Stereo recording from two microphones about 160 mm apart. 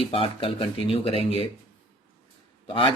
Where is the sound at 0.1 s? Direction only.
35° left (ahead or behind).